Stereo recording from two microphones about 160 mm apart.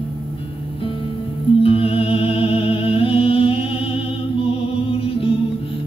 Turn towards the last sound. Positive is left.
turn(degrees=35)  # may be behind; listen again after turning